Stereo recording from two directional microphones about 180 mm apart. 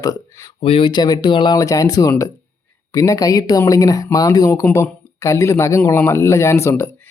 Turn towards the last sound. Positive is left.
turn(degrees=15)  # may be behind; listen again after turning